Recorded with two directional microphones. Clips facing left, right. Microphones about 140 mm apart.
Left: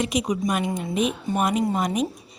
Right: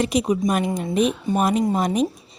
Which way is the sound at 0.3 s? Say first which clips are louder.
Right 3 dB; 30° right (ahead or behind).